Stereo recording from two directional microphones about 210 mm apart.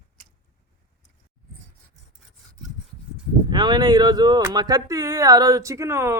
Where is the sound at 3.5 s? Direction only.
20° right (ahead or behind).